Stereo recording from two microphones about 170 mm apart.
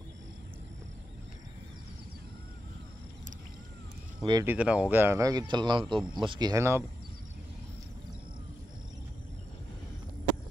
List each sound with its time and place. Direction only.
4.2 s speech: 25° right (ahead or behind)
4.5 s speech: 5° right (ahead or behind)